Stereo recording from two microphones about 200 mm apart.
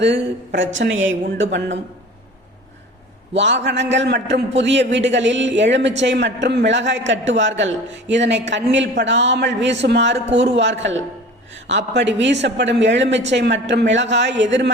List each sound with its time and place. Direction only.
0.0 s a woman's voice: 60° right (ahead or behind)
3.3 s a man's voice: 65° right (ahead or behind)